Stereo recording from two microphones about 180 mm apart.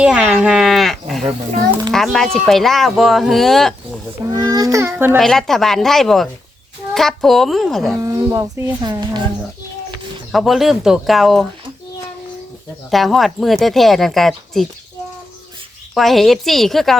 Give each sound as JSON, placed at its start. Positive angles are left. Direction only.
{"t": 0.0, "sound": "a sound", "side_deg": -5}
{"t": 1.2, "sound": "speech", "side_deg": -40}
{"t": 1.9, "sound": "speech", "side_deg": 0}
{"t": 4.3, "sound": "a child's voice", "side_deg": -20}
{"t": 5.1, "sound": "speech", "side_deg": 0}
{"t": 7.9, "sound": "a child's voice", "side_deg": -15}
{"t": 10.3, "sound": "speech", "side_deg": 0}
{"t": 12.9, "sound": "speech", "side_deg": 0}
{"t": 16.0, "sound": "speech", "side_deg": 0}